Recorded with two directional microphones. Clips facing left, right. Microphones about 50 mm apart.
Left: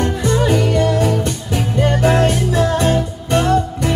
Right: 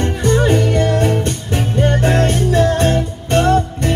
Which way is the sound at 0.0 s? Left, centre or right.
Right.